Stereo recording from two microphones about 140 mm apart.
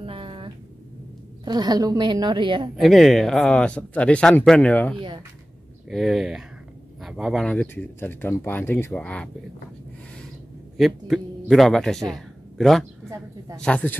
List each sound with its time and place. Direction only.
0.0 s a sound: 40° right (ahead or behind)
1.4 s speech: 30° right (ahead or behind)
2.7 s speech: centre (ahead or behind)
5.9 s speech: centre (ahead or behind)
7.4 s speech: 10° left (ahead or behind)
10.8 s speech: centre (ahead or behind)